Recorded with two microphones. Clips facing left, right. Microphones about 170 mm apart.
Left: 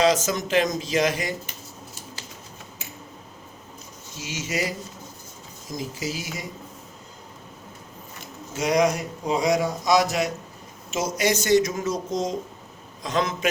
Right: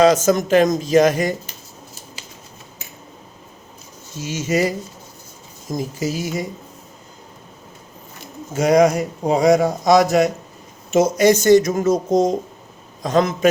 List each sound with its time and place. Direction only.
0.0 s speech: 50° right (ahead or behind)
4.2 s speech: 50° right (ahead or behind)
8.5 s speech: 55° right (ahead or behind)